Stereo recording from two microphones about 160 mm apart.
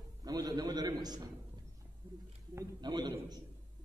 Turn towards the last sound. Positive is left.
turn(degrees=-25)  # may be behind; listen again after turning